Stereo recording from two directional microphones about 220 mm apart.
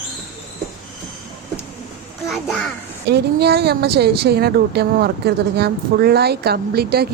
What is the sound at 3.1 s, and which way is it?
A woman's voice, 50° right (ahead or behind).